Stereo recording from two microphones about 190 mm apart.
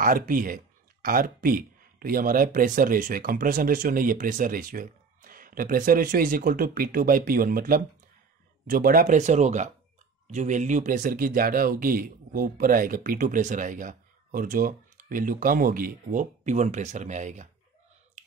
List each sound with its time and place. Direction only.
0.0 s speech: 45° right (ahead or behind)